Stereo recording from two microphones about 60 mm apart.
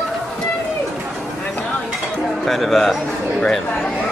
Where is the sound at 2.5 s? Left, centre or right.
Centre.